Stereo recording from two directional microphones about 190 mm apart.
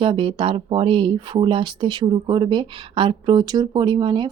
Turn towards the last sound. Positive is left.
turn(degrees=-25)  # may be behind; listen again after turning